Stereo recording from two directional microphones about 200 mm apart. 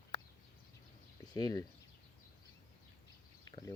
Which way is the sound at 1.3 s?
20° left (ahead or behind).